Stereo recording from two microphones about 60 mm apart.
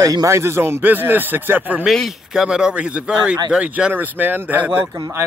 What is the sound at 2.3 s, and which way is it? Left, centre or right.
Speech, centre.